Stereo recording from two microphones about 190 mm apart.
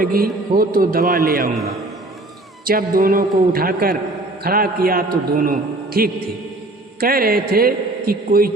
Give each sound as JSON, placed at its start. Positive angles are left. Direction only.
{"t": 0.0, "sound": "a man's voice", "side_deg": -50}
{"t": 2.6, "sound": "a man's voice", "side_deg": -50}